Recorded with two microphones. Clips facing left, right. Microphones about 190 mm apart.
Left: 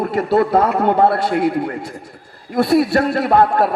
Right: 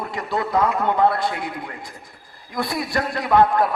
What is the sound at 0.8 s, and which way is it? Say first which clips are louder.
Speech: left 6 dB; 40° left (ahead or behind).